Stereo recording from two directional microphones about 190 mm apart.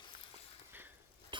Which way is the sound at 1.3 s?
25° right (ahead or behind).